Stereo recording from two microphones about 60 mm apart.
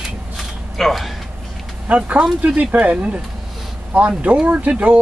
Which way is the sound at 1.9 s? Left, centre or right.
Right.